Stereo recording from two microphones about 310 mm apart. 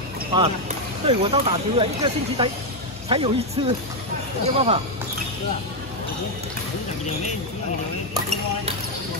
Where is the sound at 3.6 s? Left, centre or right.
Centre.